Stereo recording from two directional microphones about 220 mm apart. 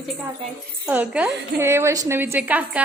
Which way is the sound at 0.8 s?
5° right (ahead or behind).